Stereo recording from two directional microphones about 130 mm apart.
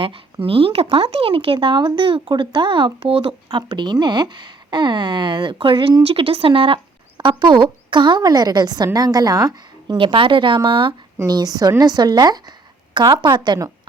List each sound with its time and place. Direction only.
0.4 s a woman's voice: 45° right (ahead or behind)